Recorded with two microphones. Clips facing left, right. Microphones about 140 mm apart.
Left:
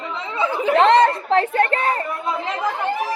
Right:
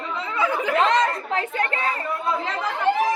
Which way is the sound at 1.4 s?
40° left (ahead or behind).